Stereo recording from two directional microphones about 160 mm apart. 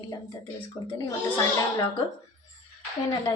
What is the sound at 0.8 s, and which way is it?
Speech, 20° left (ahead or behind).